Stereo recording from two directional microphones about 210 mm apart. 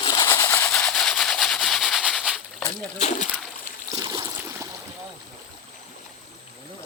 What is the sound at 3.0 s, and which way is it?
Splash, 35° left (ahead or behind).